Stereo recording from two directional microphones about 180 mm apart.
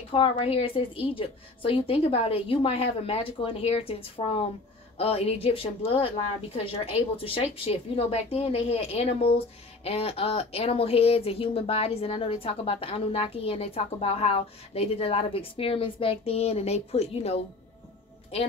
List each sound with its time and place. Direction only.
0.1 s speech: 30° left (ahead or behind)